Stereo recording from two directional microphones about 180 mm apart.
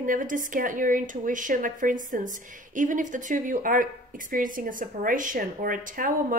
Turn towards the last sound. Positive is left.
turn(degrees=-50)  # may be behind; listen again after turning